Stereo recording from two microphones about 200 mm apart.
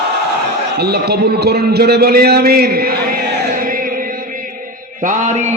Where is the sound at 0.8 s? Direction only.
55° right (ahead or behind).